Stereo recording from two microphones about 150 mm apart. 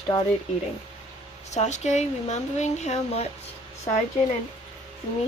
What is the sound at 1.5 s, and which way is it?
Speech, 50° left (ahead or behind).